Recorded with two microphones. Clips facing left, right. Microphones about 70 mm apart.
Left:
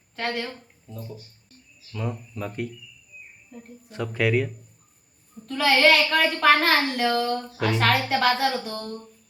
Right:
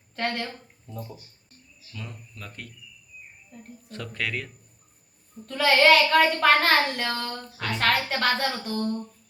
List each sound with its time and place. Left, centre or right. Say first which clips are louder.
0.2 s speech: even; centre
1.9 s speech: left 9 dB; centre
3.5 s speech: left 2 dB; centre
5.5 s speech: even; centre